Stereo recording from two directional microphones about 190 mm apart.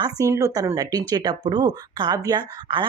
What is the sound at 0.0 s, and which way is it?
Speech, 15° right (ahead or behind).